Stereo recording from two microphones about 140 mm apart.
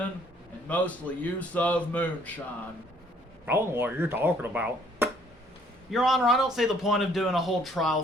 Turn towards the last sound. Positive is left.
turn(degrees=0)  # may be behind; listen again after turning